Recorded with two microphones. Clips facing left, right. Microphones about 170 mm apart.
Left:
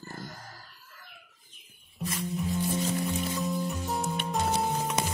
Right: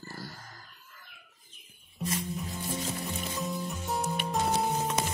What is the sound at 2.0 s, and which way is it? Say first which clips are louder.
Music: right 2 dB; centre (ahead or behind).